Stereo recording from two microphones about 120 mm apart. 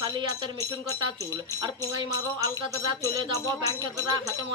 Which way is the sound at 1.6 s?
35° right (ahead or behind).